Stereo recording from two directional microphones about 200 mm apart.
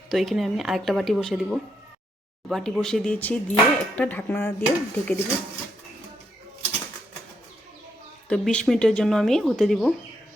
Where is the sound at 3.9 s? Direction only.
5° left (ahead or behind).